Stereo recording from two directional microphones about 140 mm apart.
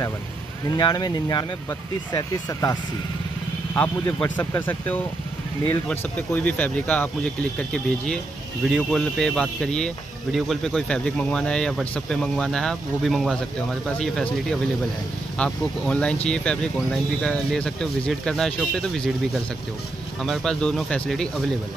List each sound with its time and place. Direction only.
0.7 s speech: 30° left (ahead or behind)
3.7 s speech: 15° left (ahead or behind)
8.6 s speech: centre (ahead or behind)
20.2 s speech: 5° left (ahead or behind)